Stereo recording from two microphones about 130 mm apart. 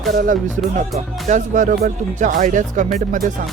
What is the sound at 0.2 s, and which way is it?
Speech, 90° right.